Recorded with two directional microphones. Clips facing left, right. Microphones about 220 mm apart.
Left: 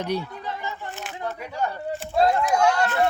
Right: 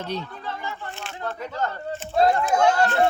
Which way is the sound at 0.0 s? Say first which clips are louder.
Left 3 dB; 15° left (ahead or behind).